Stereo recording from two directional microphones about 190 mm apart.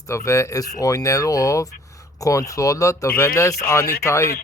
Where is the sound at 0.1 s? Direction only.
15° left (ahead or behind).